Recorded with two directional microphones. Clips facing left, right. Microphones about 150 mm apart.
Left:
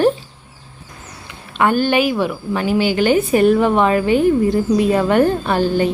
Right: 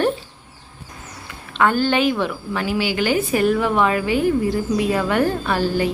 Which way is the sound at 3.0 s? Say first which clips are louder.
Left 5 dB; 25° left (ahead or behind).